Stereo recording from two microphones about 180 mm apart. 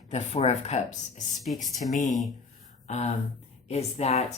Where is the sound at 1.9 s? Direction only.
45° left (ahead or behind).